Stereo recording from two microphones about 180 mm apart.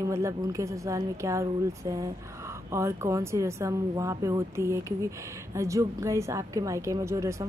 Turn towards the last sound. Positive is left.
turn(degrees=-15)  # may be behind; listen again after turning